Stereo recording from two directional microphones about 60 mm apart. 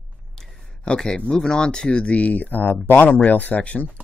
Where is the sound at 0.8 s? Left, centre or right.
Centre.